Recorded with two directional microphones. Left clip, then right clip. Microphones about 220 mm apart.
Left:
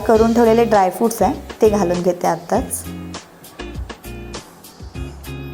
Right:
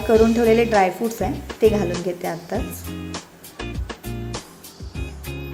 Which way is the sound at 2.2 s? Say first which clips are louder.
Left 9 dB; centre (ahead or behind).